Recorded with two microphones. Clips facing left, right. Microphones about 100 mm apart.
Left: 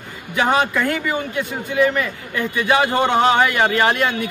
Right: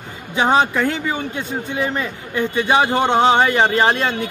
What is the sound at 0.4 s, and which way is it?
Speech, 25° right (ahead or behind).